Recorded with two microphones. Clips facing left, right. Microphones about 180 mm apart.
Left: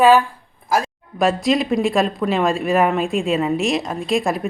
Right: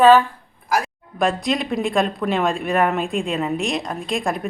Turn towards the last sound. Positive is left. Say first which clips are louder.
# left 4 dB
turn(degrees=0)  # may be behind; listen again after turning